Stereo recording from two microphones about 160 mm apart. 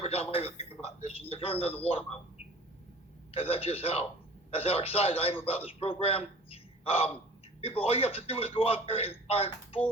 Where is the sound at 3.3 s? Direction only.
40° left (ahead or behind).